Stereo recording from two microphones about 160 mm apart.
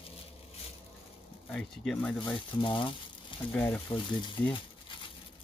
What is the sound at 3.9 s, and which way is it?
Speech, 30° left (ahead or behind).